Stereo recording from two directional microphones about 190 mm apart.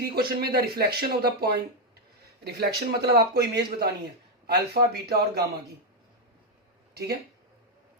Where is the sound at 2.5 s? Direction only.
55° right (ahead or behind).